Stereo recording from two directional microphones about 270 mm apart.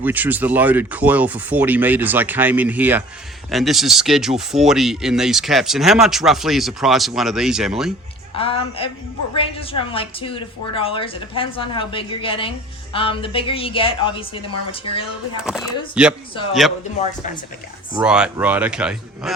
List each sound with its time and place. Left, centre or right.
0.0 s speech: centre
8.4 s a woman's voice: centre
15.4 s speech: centre
18.0 s speech: centre